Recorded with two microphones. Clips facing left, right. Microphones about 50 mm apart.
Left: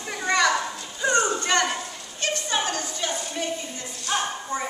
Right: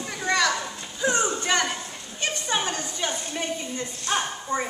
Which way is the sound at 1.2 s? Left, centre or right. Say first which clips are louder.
Left 1 dB; centre.